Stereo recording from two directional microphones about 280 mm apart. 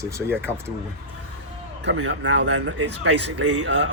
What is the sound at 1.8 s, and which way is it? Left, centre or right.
Speech, right.